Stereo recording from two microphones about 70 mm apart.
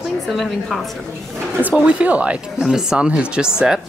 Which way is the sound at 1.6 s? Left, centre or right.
Centre.